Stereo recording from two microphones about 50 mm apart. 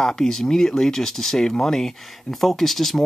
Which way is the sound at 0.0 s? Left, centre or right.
Centre.